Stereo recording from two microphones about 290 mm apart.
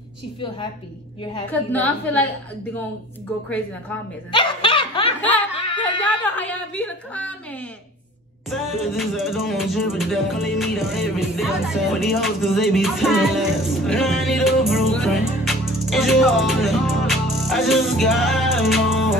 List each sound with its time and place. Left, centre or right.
1.5 s music: centre
4.3 s laughter: centre
5.2 s a sound: centre
8.5 s music: centre